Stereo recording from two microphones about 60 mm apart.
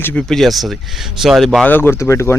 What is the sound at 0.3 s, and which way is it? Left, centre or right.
Speech, centre.